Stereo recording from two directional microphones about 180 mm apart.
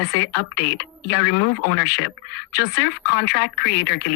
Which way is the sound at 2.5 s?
65° left (ahead or behind).